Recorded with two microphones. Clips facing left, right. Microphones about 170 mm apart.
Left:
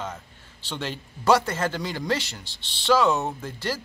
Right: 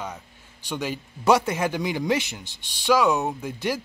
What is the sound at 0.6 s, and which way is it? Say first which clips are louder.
Speech: right 3 dB; 10° right (ahead or behind).